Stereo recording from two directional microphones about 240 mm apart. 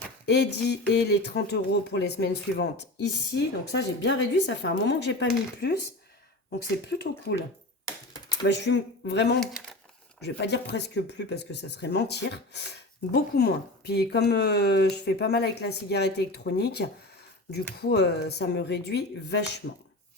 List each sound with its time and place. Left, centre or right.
0.3 s speech: left
6.8 s speech: left
8.4 s speech: left
9.4 s speech: centre
10.2 s speech: left